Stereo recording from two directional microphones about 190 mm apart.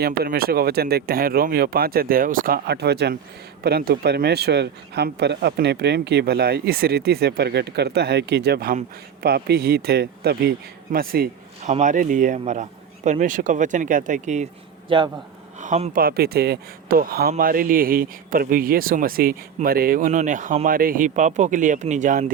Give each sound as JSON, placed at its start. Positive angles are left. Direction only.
{"t": 0.0, "sound": "speech", "side_deg": -55}
{"t": 11.6, "sound": "speech", "side_deg": -40}
{"t": 14.8, "sound": "a man's voice", "side_deg": -25}
{"t": 15.6, "sound": "speech", "side_deg": -40}
{"t": 16.0, "sound": "speech", "side_deg": -55}